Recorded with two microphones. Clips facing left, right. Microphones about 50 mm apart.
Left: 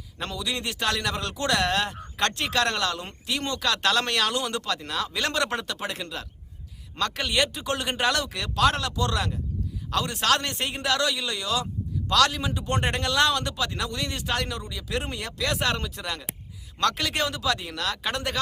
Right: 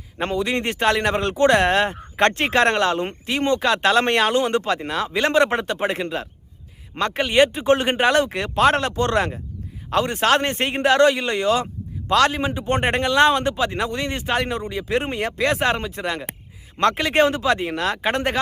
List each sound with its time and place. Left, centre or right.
0.2 s a man's voice: right